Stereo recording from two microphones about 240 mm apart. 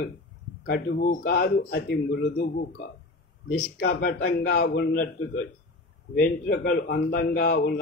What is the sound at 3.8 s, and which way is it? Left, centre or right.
Speech, left.